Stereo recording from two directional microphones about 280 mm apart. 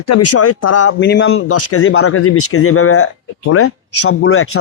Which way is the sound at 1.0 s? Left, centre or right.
Left.